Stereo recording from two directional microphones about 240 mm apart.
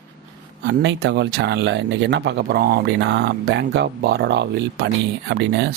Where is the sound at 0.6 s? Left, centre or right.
Right.